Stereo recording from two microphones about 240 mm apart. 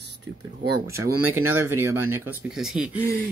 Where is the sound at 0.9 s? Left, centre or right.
Centre.